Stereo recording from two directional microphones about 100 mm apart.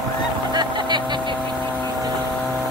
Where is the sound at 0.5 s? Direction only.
50° right (ahead or behind).